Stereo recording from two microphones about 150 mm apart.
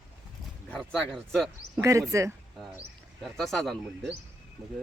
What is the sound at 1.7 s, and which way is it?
Speech, 20° right (ahead or behind).